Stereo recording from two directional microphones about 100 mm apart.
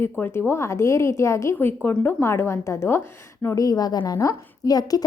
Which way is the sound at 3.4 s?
35° left (ahead or behind).